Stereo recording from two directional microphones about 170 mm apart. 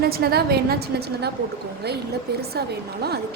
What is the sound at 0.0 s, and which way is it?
A woman's voice, 65° right (ahead or behind).